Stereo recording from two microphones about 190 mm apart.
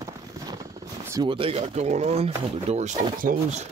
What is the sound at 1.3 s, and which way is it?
Speech, 30° right (ahead or behind).